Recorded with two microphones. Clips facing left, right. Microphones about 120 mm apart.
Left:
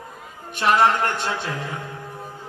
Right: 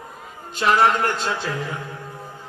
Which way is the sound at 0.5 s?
20° left (ahead or behind).